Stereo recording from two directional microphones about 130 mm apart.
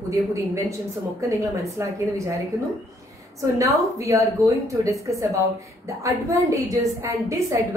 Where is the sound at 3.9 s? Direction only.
25° right (ahead or behind).